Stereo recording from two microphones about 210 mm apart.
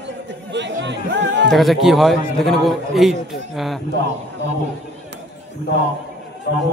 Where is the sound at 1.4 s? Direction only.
Centre (ahead or behind).